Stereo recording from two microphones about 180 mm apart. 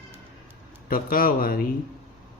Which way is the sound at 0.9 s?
55° left (ahead or behind).